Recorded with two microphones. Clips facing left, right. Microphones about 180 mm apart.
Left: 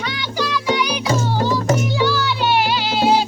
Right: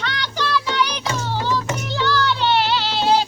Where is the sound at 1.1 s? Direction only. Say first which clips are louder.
Left 4 dB; 40° left (ahead or behind).